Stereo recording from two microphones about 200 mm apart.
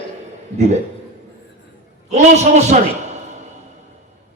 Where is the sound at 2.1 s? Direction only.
35° right (ahead or behind).